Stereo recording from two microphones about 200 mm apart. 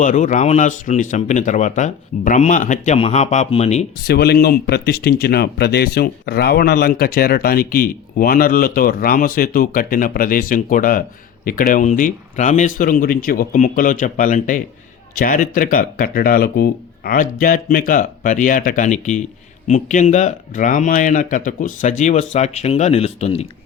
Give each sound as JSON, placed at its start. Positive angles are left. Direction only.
{"t": 0.0, "sound": "speech", "side_deg": 40}
{"t": 4.0, "sound": "speech", "side_deg": 50}